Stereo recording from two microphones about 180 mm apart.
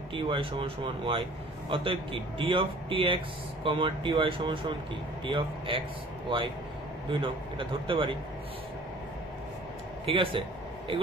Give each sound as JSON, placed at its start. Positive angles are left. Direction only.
{"t": 0.1, "sound": "speech", "side_deg": -30}
{"t": 10.0, "sound": "speech", "side_deg": -30}